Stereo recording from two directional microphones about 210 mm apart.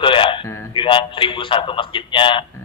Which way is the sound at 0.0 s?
25° left (ahead or behind).